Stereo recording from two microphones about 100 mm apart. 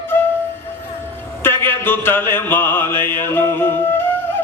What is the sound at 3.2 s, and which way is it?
Music, 20° left (ahead or behind).